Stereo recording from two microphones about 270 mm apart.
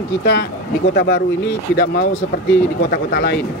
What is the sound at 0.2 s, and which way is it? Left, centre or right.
Speech, left.